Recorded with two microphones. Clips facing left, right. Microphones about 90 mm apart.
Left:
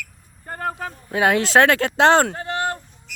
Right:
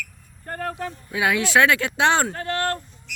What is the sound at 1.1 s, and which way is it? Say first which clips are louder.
Speech: left 4 dB; 45° left (ahead or behind).